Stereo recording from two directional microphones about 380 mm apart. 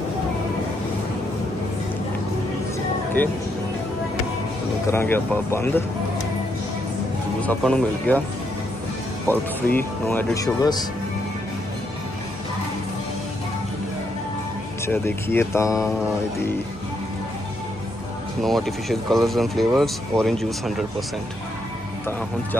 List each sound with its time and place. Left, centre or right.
3.2 s speech: centre
4.8 s speech: centre
7.4 s speech: centre
9.3 s speech: centre
14.9 s speech: centre
18.4 s speech: centre